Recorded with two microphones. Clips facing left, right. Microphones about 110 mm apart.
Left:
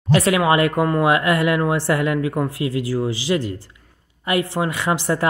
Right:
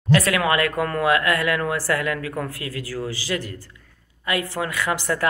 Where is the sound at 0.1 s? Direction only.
25° left (ahead or behind).